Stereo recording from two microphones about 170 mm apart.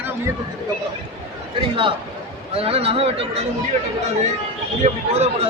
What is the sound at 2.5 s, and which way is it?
Speech, 35° right (ahead or behind).